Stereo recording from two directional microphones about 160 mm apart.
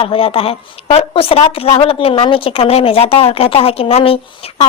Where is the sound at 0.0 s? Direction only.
35° left (ahead or behind).